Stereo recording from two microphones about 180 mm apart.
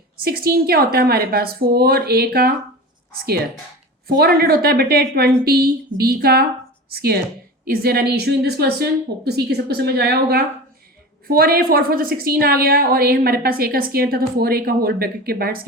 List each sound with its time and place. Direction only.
0.3 s a woman's voice: 55° right (ahead or behind)
4.0 s a woman's voice: 60° right (ahead or behind)